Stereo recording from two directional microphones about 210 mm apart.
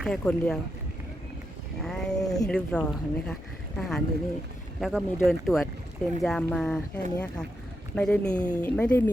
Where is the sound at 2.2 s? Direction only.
15° left (ahead or behind).